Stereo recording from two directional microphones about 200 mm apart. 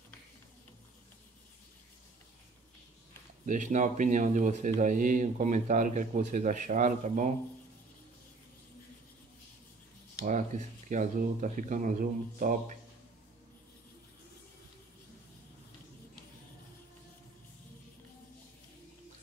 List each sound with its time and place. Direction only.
3.4 s a man's voice: 40° right (ahead or behind)
10.2 s a man's voice: 40° right (ahead or behind)